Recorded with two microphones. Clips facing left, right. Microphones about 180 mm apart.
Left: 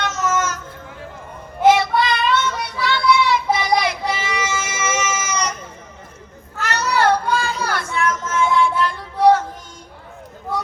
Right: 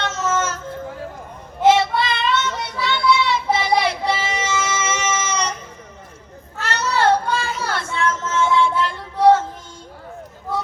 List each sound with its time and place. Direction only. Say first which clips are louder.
0.0 s a sound: left 1 dB; 30° right (ahead or behind)
1.6 s child singing: left 1 dB; 25° right (ahead or behind)
6.6 s child singing: left 1 dB; 30° right (ahead or behind)